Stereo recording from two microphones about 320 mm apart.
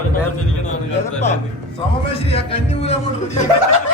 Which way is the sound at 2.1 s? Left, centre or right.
Centre.